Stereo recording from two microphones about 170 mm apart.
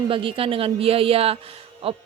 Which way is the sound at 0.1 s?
30° right (ahead or behind).